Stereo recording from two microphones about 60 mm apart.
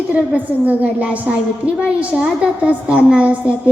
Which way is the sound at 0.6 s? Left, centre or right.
Right.